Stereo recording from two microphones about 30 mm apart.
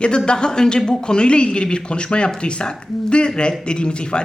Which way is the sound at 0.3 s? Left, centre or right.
Left.